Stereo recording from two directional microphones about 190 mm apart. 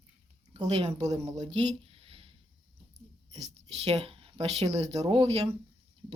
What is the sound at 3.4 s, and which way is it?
Speech, 35° right (ahead or behind).